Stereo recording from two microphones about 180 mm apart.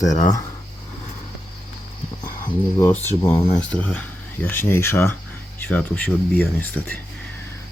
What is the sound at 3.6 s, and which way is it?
Speech, 5° left (ahead or behind).